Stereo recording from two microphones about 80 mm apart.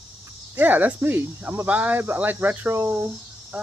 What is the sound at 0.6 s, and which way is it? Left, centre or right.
Speech, right.